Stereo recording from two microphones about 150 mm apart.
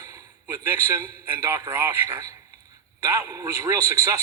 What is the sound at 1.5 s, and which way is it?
A man's voice, 15° right (ahead or behind).